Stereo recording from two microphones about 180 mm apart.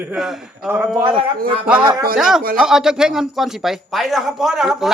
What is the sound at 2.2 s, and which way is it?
Speech, 5° right (ahead or behind).